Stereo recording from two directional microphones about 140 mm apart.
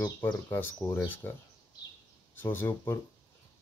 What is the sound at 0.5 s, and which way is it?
Speech, 15° left (ahead or behind).